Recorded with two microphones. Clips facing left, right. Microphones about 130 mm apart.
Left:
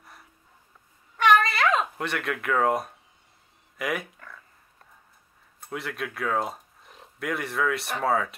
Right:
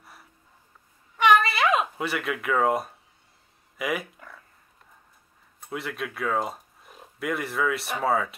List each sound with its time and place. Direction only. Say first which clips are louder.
0.0 s a sound: even; centre (ahead or behind)
3.7 s speech: right 1 dB; centre (ahead or behind)
5.6 s speech: right 1 dB; centre (ahead or behind)